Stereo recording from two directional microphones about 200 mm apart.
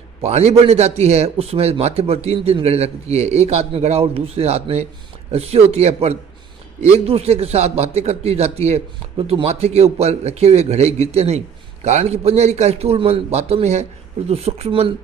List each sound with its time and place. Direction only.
0.2 s a man's voice: 30° right (ahead or behind)